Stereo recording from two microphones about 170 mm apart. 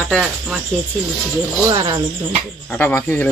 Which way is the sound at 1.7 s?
20° right (ahead or behind).